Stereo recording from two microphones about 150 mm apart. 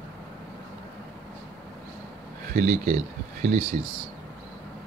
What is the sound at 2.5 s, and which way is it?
Speech, 60° right (ahead or behind).